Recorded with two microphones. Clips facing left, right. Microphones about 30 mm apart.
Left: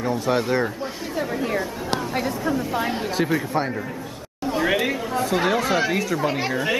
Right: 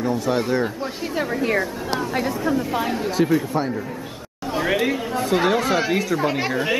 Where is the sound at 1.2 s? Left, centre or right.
Centre.